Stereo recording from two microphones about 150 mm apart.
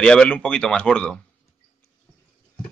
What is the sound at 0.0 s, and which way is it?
Speech, 5° left (ahead or behind).